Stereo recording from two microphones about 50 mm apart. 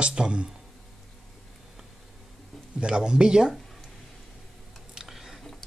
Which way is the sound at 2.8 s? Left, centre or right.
Centre.